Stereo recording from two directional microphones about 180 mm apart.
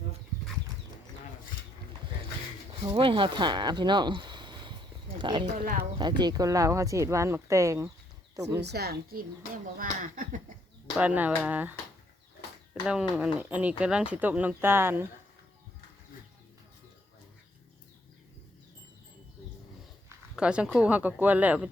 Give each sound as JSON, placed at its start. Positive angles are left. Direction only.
{"t": 2.8, "sound": "speech", "side_deg": -30}
{"t": 5.5, "sound": "speech", "side_deg": -50}
{"t": 6.0, "sound": "speech", "side_deg": -25}
{"t": 8.6, "sound": "a woman's voice", "side_deg": -65}
{"t": 9.7, "sound": "speech", "side_deg": -50}
{"t": 10.9, "sound": "speech", "side_deg": -10}
{"t": 12.9, "sound": "speech", "side_deg": -5}
{"t": 20.3, "sound": "speech", "side_deg": -5}